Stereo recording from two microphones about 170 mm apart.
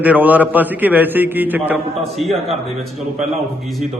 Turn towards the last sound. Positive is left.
turn(degrees=0)  # may be behind; listen again after turning